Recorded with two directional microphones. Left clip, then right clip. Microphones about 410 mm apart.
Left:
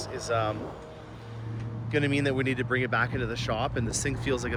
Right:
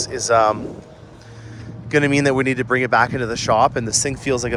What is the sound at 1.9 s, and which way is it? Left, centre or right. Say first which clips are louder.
Speech: right 11 dB; centre.